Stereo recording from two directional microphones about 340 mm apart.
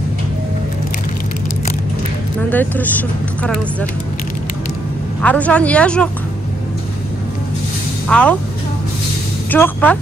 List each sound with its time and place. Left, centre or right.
2.5 s speech: centre
5.2 s speech: centre
8.1 s speech: centre
9.5 s speech: centre